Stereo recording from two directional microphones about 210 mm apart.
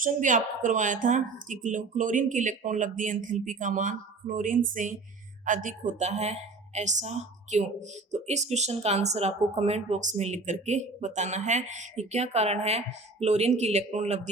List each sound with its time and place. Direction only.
0.0 s speech: 40° right (ahead or behind)